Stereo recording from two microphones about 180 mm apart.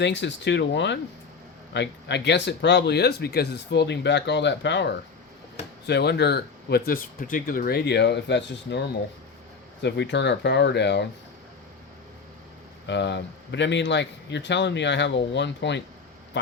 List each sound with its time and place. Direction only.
0.0 s speech: 80° left
12.9 s speech: 75° left (ahead or behind)